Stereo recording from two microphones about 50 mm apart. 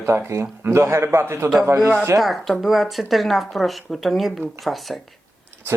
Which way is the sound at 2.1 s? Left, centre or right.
Centre.